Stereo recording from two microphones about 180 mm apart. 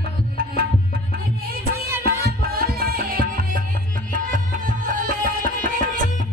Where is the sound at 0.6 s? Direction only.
55° right (ahead or behind).